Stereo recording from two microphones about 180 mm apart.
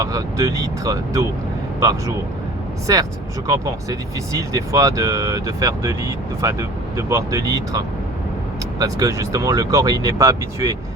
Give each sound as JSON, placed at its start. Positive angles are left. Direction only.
{"t": 0.0, "sound": "speech", "side_deg": -20}
{"t": 8.8, "sound": "speech", "side_deg": -20}